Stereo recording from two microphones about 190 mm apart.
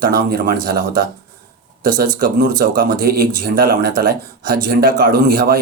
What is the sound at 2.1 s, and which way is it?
Speech, 45° right (ahead or behind).